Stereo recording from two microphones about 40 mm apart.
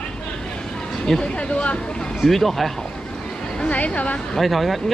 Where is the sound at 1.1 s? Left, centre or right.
Centre.